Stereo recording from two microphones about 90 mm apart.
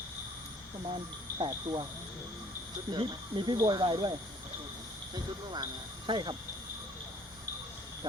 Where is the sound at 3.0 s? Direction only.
65° right (ahead or behind).